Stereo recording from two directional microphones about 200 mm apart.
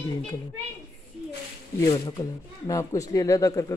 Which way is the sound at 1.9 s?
15° left (ahead or behind).